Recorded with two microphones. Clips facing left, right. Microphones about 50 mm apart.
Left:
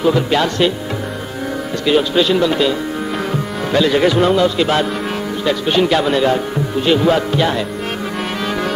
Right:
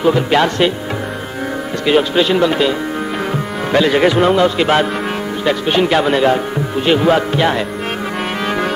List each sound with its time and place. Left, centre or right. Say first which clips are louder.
0.3 s music: right 2 dB; right
1.9 s speech: right 1 dB; right
3.7 s music: right 1 dB; right
5.4 s speech: right 1 dB; right
6.9 s music: right 1 dB; right